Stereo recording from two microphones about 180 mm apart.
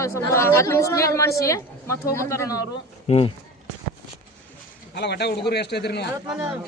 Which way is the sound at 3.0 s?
35° left (ahead or behind).